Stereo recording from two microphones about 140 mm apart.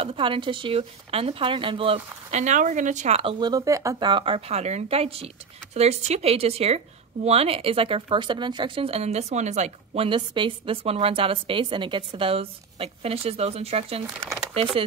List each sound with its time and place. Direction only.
0.0 s a woman's voice: 40° right (ahead or behind)
2.4 s a woman's voice: 60° right (ahead or behind)
3.2 s speech: 35° right (ahead or behind)
4.1 s speech: 40° right (ahead or behind); by 10.0 s 55° right (ahead or behind)
10.0 s a woman's voice: 35° right (ahead or behind)